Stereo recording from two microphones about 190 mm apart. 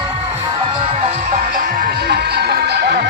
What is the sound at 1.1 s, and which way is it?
Music, 45° right (ahead or behind).